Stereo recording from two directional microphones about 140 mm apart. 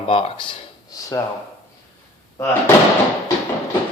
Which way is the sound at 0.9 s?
25° left (ahead or behind).